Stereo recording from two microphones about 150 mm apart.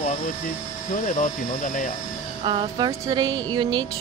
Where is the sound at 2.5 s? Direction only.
30° right (ahead or behind).